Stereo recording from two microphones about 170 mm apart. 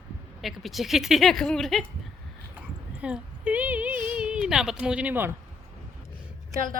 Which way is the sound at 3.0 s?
5° right (ahead or behind).